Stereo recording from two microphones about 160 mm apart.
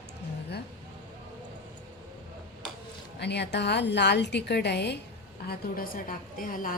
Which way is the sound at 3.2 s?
90° left.